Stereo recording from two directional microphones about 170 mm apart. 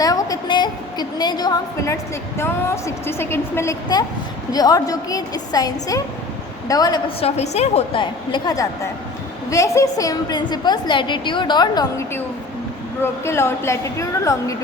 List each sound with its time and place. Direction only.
0.0 s a woman's voice: 20° left (ahead or behind)
7.2 s a woman's voice: 40° left (ahead or behind)
8.3 s a woman's voice: 20° left (ahead or behind)